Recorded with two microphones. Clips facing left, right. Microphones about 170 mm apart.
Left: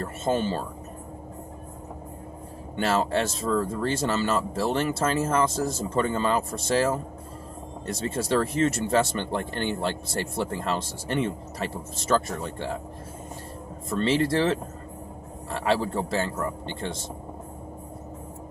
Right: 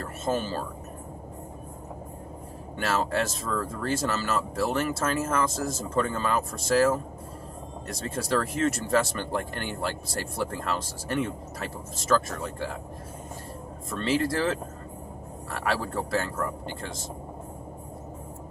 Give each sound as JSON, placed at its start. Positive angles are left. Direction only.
{"t": 0.0, "sound": "speech", "side_deg": 25}
{"t": 2.7, "sound": "speech", "side_deg": 30}
{"t": 7.9, "sound": "speech", "side_deg": 25}
{"t": 14.1, "sound": "speech", "side_deg": 30}